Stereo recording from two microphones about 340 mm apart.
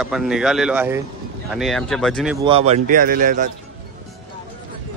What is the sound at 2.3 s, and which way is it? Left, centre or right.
A man's voice, centre.